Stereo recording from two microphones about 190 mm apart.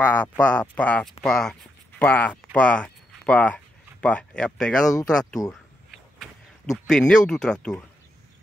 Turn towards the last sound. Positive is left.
turn(degrees=5)  # may be behind; listen again after turning